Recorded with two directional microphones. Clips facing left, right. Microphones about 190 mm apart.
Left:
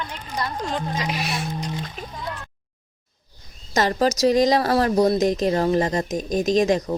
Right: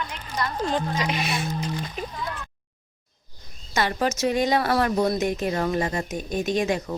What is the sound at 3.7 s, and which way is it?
Speech, 40° left (ahead or behind).